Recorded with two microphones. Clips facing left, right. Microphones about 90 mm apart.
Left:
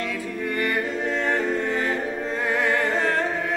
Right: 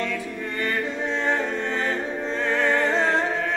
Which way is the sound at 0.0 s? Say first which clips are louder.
Even; 10° left (ahead or behind).